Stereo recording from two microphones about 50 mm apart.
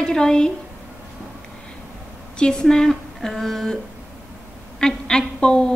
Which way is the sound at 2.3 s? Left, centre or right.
Centre.